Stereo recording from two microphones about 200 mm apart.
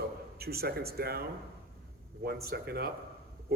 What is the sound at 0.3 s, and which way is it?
Speech, 50° right (ahead or behind).